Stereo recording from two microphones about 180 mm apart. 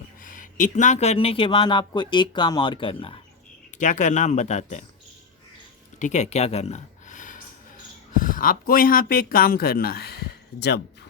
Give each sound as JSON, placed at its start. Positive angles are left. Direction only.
{"t": 0.3, "sound": "speech", "side_deg": 45}
{"t": 3.8, "sound": "speech", "side_deg": 45}
{"t": 6.0, "sound": "speech", "side_deg": 40}